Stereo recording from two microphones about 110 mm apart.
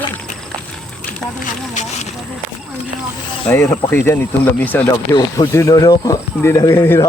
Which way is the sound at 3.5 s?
20° left (ahead or behind).